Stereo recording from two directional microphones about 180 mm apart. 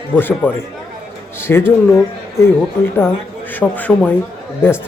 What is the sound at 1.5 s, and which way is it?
Speech, 10° left (ahead or behind).